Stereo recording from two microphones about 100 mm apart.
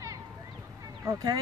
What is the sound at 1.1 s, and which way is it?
Speech, 40° right (ahead or behind).